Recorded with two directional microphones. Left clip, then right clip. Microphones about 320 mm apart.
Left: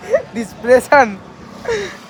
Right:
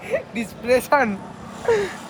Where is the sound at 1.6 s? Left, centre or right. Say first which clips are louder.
Even; centre.